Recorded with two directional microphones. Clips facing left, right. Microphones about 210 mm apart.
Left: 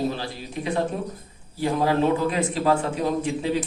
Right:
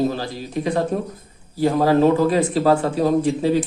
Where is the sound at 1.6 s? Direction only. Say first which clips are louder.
Right 6 dB; 40° right (ahead or behind).